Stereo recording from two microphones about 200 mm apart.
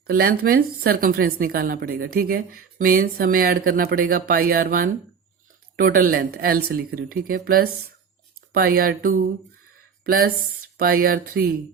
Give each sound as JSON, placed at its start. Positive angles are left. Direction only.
{"t": 0.1, "sound": "a woman's voice", "side_deg": -50}